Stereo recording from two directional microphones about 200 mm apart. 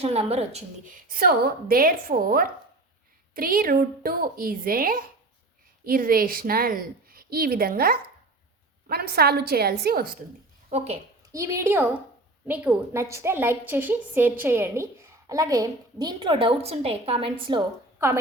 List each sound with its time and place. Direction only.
0.0 s a woman's voice: 30° right (ahead or behind); by 10.2 s 50° right (ahead or behind)
10.7 s a woman's voice: 35° right (ahead or behind)
11.3 s a woman's voice: 15° right (ahead or behind)